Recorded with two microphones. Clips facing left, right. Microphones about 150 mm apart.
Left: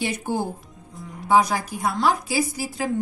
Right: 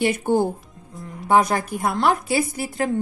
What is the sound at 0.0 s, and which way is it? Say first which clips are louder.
A woman's voice: right 6 dB; 55° right (ahead or behind).